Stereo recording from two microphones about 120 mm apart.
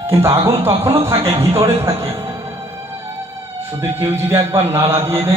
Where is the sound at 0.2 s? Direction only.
25° right (ahead or behind).